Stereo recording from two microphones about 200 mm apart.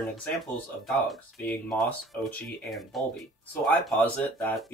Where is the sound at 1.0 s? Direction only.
Centre (ahead or behind).